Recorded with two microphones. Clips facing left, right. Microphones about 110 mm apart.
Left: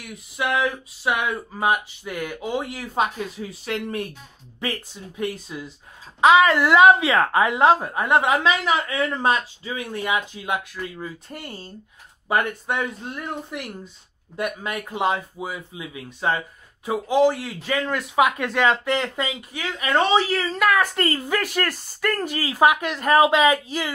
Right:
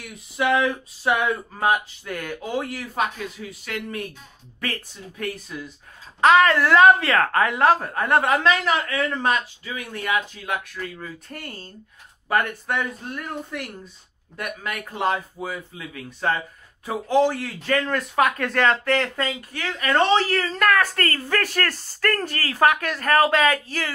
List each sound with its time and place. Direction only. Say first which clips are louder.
0.0 s speech: right 3 dB; centre (ahead or behind); by 4.0 s 30° left (ahead or behind)
4.6 s speech: left 2 dB; 20° left (ahead or behind)
6.2 s speech: left 1 dB; 10° left (ahead or behind)